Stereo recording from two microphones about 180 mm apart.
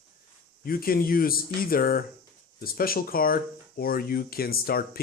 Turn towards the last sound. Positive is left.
turn(degrees=55)  # may be behind; listen again after turning